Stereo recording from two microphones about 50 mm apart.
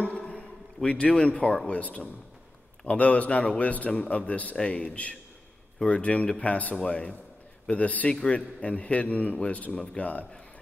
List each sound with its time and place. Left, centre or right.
0.0 s a sound: left
0.8 s a man's voice: left
8.1 s a man's voice: centre
8.5 s a man's voice: left